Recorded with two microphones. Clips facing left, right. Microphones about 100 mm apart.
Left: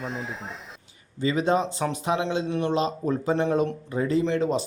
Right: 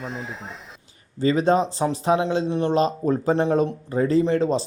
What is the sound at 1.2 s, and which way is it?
Speech, 40° right (ahead or behind).